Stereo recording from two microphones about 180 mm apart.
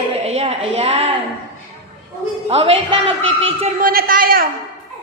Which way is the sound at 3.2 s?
90° right.